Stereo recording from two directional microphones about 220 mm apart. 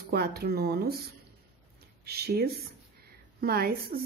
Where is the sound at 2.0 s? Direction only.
45° right (ahead or behind).